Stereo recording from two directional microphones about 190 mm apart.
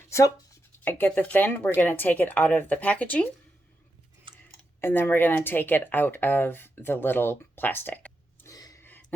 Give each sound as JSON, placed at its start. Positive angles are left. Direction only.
{"t": 0.1, "sound": "speech", "side_deg": 15}
{"t": 4.8, "sound": "speech", "side_deg": 10}